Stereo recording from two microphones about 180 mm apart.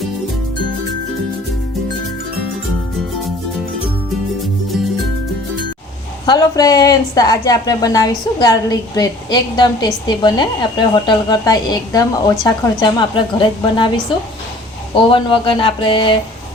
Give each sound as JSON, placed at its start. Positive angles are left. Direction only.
{"t": 6.2, "sound": "speech", "side_deg": 20}
{"t": 15.1, "sound": "speech", "side_deg": 30}